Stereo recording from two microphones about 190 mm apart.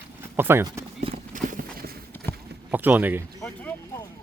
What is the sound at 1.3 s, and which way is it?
Clip-clop, 45° right (ahead or behind).